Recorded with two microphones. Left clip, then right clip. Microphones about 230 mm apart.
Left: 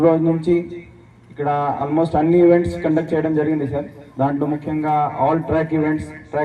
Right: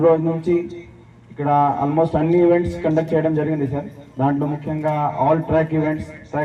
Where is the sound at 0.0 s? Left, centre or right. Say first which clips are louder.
Even; left.